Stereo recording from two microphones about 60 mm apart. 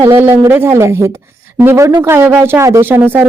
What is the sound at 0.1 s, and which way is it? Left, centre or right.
Speech, right.